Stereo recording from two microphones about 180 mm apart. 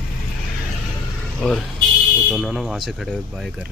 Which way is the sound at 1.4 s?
5° left (ahead or behind).